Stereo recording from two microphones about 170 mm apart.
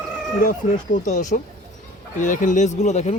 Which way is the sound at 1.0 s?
45° left (ahead or behind).